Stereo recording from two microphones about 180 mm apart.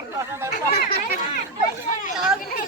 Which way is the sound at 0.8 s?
50° left (ahead or behind).